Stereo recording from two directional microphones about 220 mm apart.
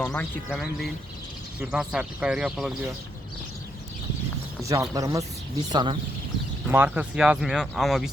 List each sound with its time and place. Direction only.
0.0 s speech: 5° left (ahead or behind)
4.7 s speech: 15° right (ahead or behind)
6.7 s speech: 10° right (ahead or behind)